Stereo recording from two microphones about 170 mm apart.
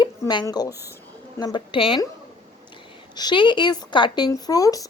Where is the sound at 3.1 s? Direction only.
25° left (ahead or behind).